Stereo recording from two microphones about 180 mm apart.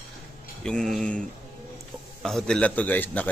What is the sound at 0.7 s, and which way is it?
Speech, 5° left (ahead or behind).